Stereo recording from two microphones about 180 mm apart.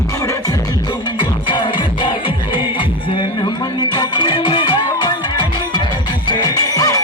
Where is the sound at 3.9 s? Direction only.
25° left (ahead or behind).